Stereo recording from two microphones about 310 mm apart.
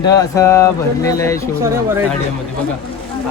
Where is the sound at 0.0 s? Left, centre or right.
Centre.